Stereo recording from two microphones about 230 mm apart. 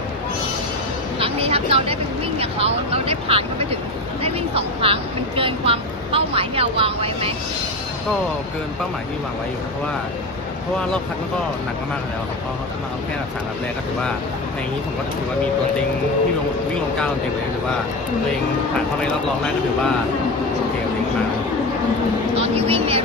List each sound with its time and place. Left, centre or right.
1.2 s vehicle: right
2.4 s a woman's voice: right
22.4 s a woman's voice: right